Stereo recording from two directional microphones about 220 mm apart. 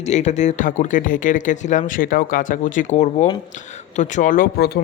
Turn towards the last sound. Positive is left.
turn(degrees=45)  # may be behind; listen again after turning